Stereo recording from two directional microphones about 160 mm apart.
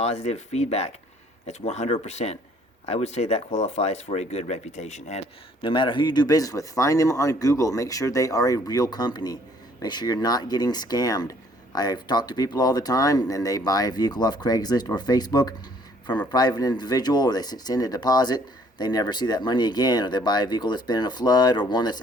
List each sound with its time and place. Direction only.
0.0 s speech: 40° left (ahead or behind)
5.6 s speech: 30° left (ahead or behind)